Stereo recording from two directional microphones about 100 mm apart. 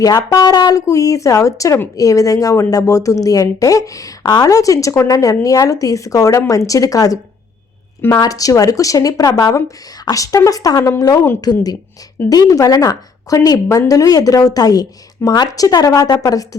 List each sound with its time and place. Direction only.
0.0 s speech: 40° left (ahead or behind)